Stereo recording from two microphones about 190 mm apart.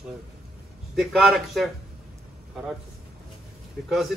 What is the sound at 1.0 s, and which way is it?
Speech, centre (ahead or behind).